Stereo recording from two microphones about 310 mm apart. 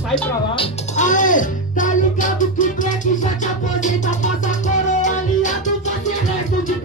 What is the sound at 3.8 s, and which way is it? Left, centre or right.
Music, left.